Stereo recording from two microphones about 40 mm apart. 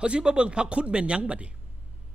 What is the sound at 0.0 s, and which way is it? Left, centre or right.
Speech, right.